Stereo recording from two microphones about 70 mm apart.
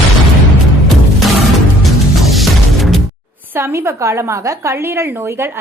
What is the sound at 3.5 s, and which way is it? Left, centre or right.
A woman's voice, right.